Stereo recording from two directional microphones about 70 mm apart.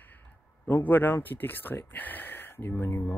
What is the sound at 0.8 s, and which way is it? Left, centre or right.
Speech, left.